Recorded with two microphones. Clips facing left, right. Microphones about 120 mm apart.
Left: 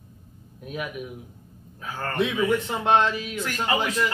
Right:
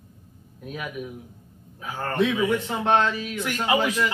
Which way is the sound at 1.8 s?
15° right (ahead or behind).